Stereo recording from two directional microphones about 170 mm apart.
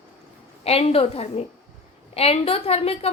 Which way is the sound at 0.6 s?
35° left (ahead or behind).